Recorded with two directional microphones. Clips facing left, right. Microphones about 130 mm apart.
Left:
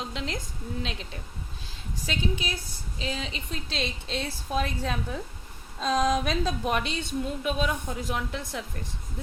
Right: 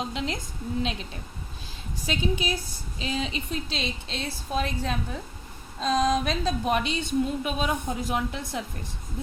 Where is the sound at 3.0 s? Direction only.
20° right (ahead or behind).